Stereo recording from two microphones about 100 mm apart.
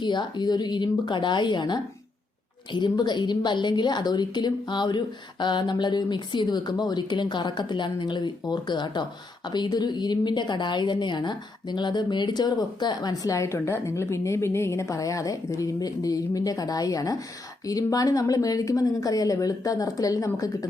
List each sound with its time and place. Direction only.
0.0 s a woman's voice: 50° left (ahead or behind)